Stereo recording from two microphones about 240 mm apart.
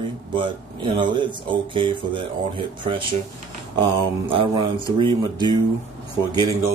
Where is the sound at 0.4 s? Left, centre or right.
Centre.